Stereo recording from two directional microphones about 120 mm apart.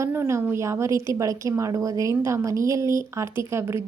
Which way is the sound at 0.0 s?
20° right (ahead or behind).